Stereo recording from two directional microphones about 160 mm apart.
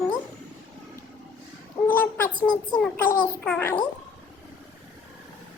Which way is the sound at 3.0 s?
10° left (ahead or behind).